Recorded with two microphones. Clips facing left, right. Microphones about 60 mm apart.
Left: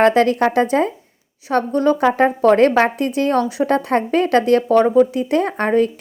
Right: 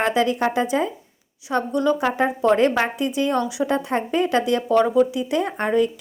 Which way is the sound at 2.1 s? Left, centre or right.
Left.